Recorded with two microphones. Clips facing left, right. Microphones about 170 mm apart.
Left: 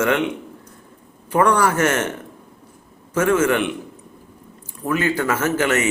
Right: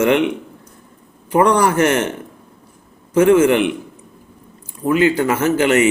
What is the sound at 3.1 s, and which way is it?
Speech, 15° right (ahead or behind).